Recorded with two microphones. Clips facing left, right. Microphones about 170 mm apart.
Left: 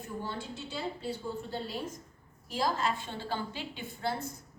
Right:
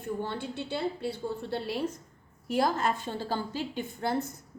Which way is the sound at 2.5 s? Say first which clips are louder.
Right 4 dB; 50° right (ahead or behind).